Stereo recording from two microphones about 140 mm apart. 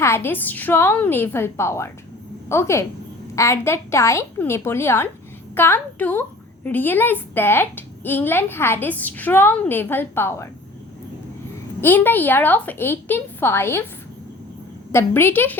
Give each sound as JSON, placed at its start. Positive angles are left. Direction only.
{"t": 0.0, "sound": "a woman's voice", "side_deg": 20}
{"t": 11.8, "sound": "a woman's voice", "side_deg": 15}
{"t": 14.9, "sound": "a woman's voice", "side_deg": 15}